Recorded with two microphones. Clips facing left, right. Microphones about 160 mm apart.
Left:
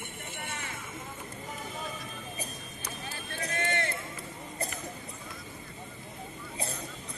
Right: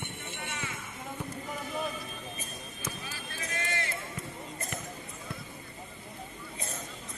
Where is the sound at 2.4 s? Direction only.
35° left (ahead or behind).